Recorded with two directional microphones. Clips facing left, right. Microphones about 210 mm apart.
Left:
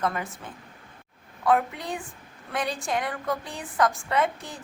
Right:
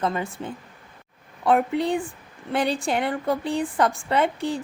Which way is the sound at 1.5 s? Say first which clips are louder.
Right 4 dB; 30° right (ahead or behind).